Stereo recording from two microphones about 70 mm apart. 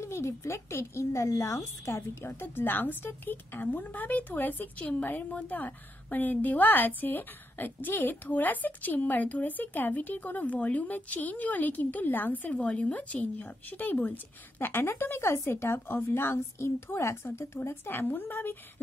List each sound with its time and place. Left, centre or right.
0.0 s speech: left